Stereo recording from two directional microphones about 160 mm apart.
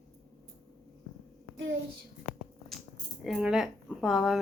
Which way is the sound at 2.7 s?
Centre (ahead or behind).